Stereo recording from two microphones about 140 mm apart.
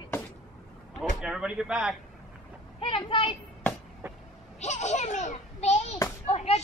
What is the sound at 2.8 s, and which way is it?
Speech, 40° left (ahead or behind).